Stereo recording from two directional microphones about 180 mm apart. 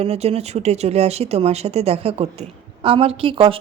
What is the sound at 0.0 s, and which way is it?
A woman's voice, 35° right (ahead or behind).